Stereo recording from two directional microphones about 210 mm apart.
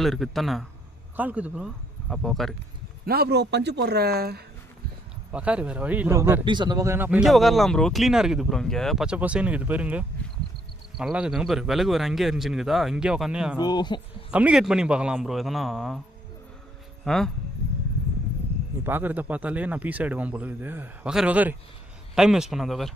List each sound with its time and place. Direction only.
0.0 s speech: centre (ahead or behind)
3.1 s speech: 50° right (ahead or behind)
5.3 s speech: 5° right (ahead or behind)
6.4 s speech: 20° right (ahead or behind); by 13.6 s 5° right (ahead or behind)
13.6 s speech: 20° left (ahead or behind)
14.3 s speech: 5° right (ahead or behind)
17.0 s speech: centre (ahead or behind)
18.9 s speech: 10° right (ahead or behind)